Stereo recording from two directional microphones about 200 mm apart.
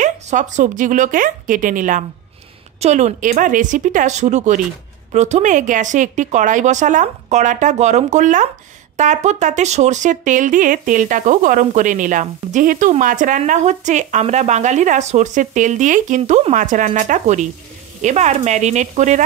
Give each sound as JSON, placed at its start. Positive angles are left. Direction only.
{"t": 0.0, "sound": "speech", "side_deg": -35}